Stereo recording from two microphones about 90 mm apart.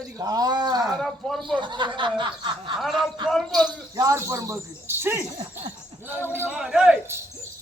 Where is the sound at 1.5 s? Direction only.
60° right (ahead or behind).